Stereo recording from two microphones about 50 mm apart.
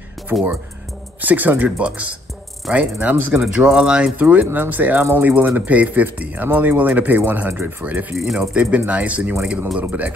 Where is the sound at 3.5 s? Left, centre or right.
Centre.